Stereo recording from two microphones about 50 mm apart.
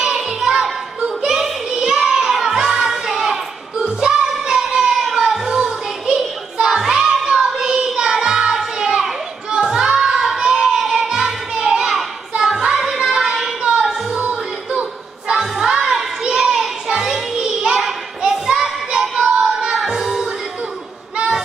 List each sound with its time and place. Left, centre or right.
0.0 s music: centre
3.7 s child singing: centre
5.5 s a sound: centre
7.2 s child singing: centre
9.5 s music: centre
14.1 s a sound: right; by 18.4 s centre
18.5 s child singing: centre
19.7 s music: centre